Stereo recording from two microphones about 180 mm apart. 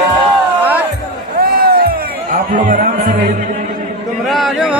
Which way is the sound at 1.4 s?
55° right (ahead or behind).